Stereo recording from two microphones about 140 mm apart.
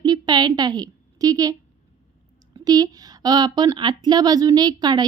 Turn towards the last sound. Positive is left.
turn(degrees=-30)  # may be behind; listen again after turning